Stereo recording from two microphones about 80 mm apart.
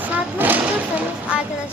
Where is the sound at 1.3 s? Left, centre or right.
Centre.